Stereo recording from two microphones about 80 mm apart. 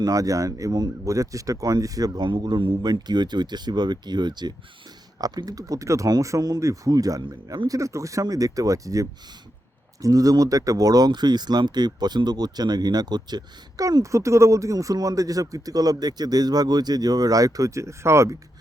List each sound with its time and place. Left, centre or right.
0.0 s speech: right
2.2 s speech: right
5.2 s speech: right
7.7 s speech: right
13.8 s speech: right